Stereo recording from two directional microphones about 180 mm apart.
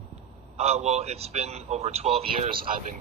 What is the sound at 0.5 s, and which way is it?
Speech, 35° right (ahead or behind).